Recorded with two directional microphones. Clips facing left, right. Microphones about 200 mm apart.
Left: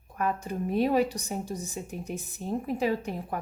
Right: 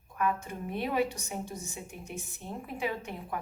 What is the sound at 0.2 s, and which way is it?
A woman's voice, 40° left (ahead or behind).